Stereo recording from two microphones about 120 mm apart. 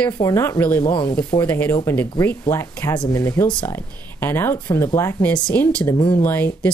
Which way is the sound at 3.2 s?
20° left (ahead or behind).